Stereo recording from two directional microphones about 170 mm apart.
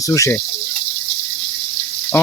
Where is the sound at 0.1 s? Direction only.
20° left (ahead or behind).